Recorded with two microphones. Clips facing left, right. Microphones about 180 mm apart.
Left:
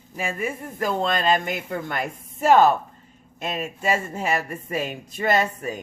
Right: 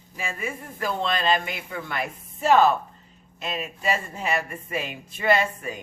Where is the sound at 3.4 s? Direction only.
50° left (ahead or behind).